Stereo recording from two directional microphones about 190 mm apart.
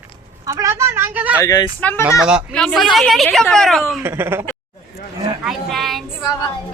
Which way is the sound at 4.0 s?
10° right (ahead or behind).